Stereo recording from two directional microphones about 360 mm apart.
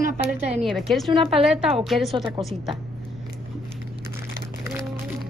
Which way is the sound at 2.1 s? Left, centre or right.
Centre.